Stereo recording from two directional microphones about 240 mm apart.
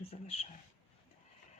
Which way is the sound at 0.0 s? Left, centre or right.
Left.